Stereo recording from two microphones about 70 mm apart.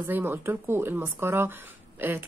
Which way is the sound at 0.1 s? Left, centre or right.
Right.